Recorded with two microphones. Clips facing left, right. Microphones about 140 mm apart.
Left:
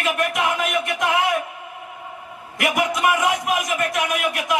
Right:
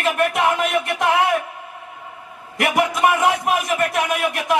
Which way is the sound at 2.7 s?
30° right (ahead or behind).